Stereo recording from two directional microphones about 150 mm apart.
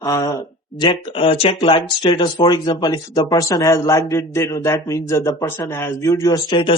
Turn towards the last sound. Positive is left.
turn(degrees=30)  # may be behind; listen again after turning